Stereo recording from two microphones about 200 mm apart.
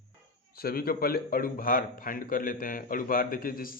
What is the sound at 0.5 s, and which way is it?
A man's voice, 50° left (ahead or behind).